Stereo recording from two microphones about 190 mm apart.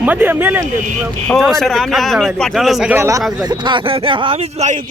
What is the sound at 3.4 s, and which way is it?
Speech, 25° right (ahead or behind).